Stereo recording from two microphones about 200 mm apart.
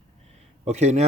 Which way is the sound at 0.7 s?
35° right (ahead or behind).